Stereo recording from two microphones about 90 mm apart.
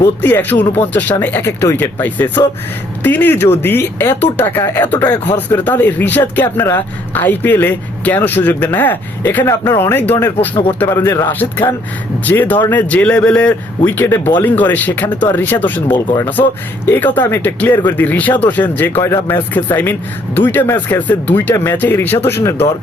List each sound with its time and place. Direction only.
0.2 s speech: 20° left (ahead or behind)